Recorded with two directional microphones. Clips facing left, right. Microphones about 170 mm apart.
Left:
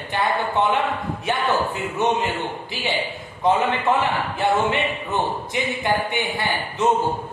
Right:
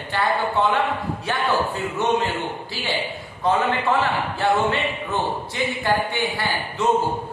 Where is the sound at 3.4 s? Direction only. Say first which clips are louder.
Left 1 dB; 20° left (ahead or behind).